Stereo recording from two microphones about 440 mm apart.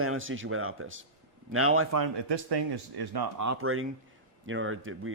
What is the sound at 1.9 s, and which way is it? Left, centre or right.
Speech, right.